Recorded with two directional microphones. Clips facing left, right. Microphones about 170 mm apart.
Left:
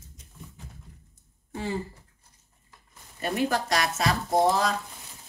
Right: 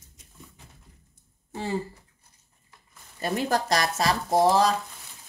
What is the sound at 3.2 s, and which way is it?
Speech, 35° right (ahead or behind).